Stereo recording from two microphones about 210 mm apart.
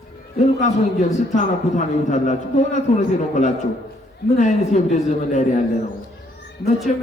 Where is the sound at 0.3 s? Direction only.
35° left (ahead or behind).